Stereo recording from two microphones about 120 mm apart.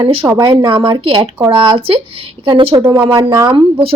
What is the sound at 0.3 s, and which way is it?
Speech, 30° right (ahead or behind).